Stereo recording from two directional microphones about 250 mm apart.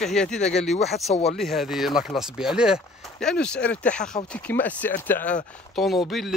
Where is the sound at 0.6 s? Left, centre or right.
Left.